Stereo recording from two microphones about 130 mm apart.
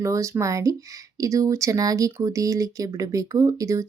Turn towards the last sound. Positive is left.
turn(degrees=-25)  # may be behind; listen again after turning